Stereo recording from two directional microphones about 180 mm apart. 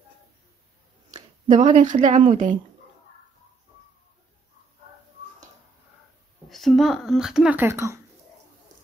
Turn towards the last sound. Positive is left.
turn(degrees=-15)  # may be behind; listen again after turning